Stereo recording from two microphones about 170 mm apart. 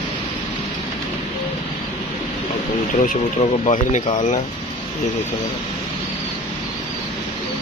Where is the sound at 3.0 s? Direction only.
45° left (ahead or behind).